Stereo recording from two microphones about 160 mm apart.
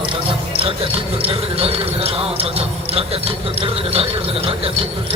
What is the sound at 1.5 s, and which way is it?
Speech, 35° right (ahead or behind).